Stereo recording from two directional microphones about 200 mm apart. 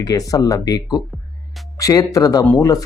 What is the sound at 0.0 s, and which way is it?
Speech, 20° left (ahead or behind).